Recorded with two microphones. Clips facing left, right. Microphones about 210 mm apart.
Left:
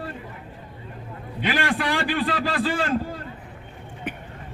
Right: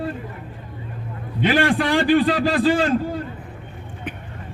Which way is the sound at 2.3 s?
40° right (ahead or behind).